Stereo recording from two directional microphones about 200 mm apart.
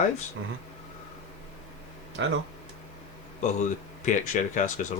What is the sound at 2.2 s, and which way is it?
Speech, 65° right (ahead or behind).